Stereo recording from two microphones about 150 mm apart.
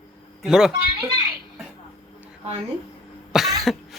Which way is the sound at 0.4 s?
5° right (ahead or behind).